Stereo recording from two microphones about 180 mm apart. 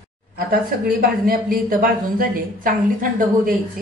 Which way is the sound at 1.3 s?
50° right (ahead or behind).